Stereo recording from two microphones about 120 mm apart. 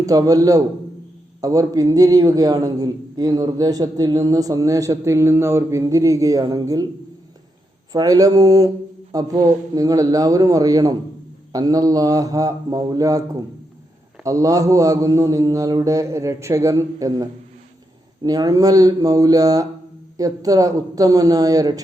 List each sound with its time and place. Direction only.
0.0 s a man's voice: 30° right (ahead or behind)
7.9 s a man's voice: 30° right (ahead or behind)
14.3 s a man's voice: 30° right (ahead or behind)